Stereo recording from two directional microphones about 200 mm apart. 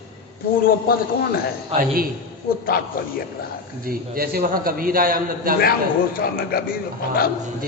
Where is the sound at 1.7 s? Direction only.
45° right (ahead or behind).